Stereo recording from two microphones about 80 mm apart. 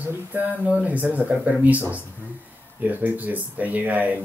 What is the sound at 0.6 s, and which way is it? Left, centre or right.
Speech, centre.